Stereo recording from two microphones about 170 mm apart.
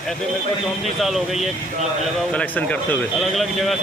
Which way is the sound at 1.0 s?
Centre (ahead or behind).